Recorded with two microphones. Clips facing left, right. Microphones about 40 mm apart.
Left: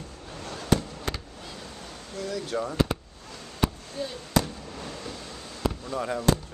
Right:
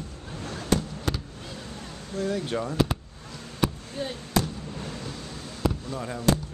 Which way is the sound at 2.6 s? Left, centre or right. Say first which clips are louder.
Left 2 dB; centre.